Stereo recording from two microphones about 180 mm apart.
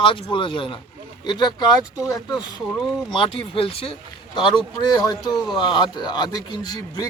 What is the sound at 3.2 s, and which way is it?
Speech, 30° left (ahead or behind).